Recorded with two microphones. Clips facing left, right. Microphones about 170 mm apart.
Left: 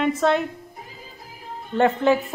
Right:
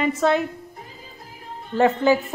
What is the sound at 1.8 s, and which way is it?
Speech, centre (ahead or behind).